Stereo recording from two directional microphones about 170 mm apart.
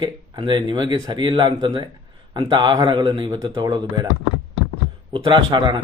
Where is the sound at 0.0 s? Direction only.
25° right (ahead or behind).